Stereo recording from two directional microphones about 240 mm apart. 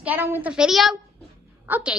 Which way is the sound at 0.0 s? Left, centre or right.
Centre.